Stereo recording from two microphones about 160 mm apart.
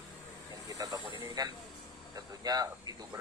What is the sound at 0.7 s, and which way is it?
A man's voice, 20° right (ahead or behind).